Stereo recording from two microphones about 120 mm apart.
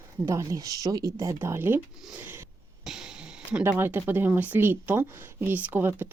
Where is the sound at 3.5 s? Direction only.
15° right (ahead or behind).